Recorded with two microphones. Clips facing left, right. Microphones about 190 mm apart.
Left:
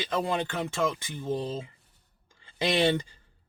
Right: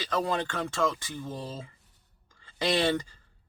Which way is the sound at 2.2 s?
20° left (ahead or behind).